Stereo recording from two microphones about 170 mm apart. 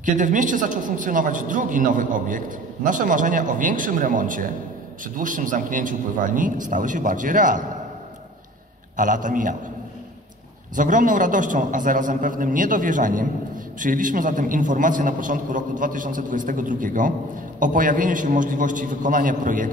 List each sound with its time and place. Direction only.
0.0 s a man's voice: 50° right (ahead or behind)
8.9 s a man's voice: 50° right (ahead or behind)
10.8 s a man's voice: 50° right (ahead or behind)